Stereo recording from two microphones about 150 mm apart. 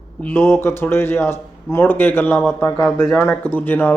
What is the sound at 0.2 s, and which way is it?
Speech, 15° left (ahead or behind).